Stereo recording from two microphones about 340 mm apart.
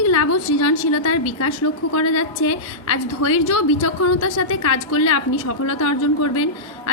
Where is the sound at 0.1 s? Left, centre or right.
Left.